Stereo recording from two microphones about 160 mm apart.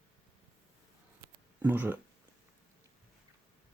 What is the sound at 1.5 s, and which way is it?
Speech, 10° right (ahead or behind).